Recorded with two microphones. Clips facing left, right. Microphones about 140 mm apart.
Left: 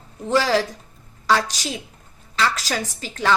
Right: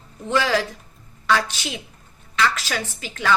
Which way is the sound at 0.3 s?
35° left (ahead or behind).